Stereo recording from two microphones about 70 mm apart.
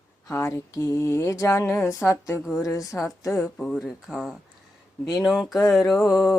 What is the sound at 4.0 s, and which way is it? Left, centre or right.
Speech, centre.